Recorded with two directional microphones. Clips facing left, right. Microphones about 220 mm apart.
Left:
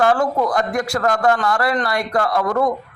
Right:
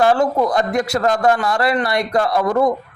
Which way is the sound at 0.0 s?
25° right (ahead or behind).